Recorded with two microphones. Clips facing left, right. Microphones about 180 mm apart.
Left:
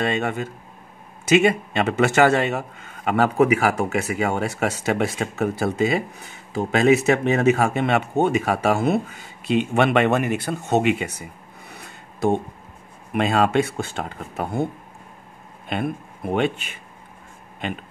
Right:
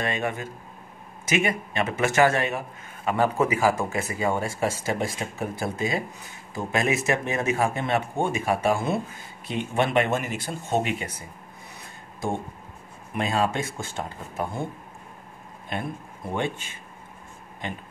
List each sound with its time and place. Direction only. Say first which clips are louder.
1.8 s speech: left 3 dB; 70° left (ahead or behind)
11.7 s a sound: left 2 dB; 70° left (ahead or behind)
13.1 s speech: left 6 dB; 75° left (ahead or behind)
15.7 s speech: left 6 dB; 75° left (ahead or behind)
17.6 s speech: left 5 dB; 80° left